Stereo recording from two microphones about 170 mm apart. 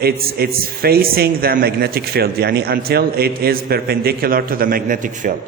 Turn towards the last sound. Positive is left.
turn(degrees=-50)  # may be behind; listen again after turning